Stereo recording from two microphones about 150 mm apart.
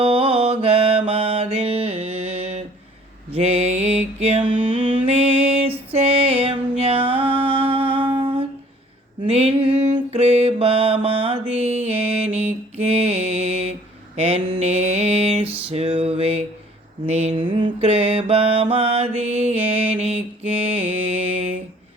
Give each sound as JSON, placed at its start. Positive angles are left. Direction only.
{"t": 0.0, "sound": "mantra", "side_deg": -40}
{"t": 4.9, "sound": "music", "side_deg": -45}
{"t": 8.2, "sound": "humming", "side_deg": -35}
{"t": 9.2, "sound": "mantra", "side_deg": -40}
{"t": 15.7, "sound": "a sound", "side_deg": -40}
{"t": 17.1, "sound": "mantra", "side_deg": -45}